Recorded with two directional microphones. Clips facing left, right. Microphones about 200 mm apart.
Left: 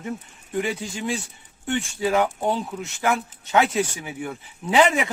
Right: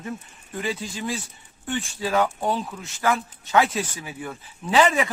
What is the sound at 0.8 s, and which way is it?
Speech, 25° left (ahead or behind).